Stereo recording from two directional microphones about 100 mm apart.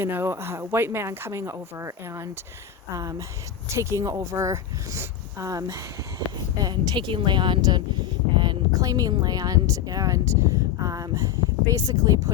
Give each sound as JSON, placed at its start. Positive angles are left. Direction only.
{"t": 0.0, "sound": "speech", "side_deg": -25}